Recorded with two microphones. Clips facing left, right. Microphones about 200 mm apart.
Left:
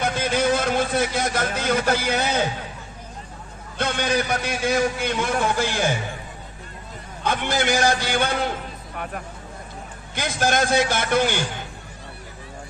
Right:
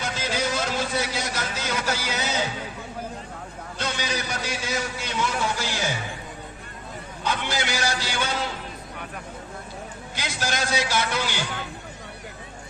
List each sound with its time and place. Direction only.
0.0 s speech: 55° left (ahead or behind)
3.8 s a man's voice: 55° left (ahead or behind)
7.3 s a man's voice: 55° left (ahead or behind)
10.2 s a man's voice: 55° left (ahead or behind)